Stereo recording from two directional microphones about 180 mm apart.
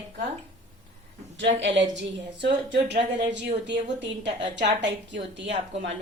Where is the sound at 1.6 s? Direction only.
85° right.